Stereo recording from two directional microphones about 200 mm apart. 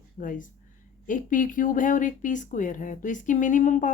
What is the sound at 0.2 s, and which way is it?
Speech, 40° left (ahead or behind).